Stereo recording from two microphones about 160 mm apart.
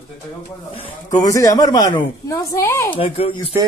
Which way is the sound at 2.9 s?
35° left (ahead or behind).